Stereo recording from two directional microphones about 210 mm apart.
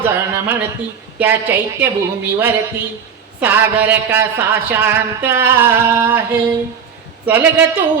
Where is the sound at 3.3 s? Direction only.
10° right (ahead or behind).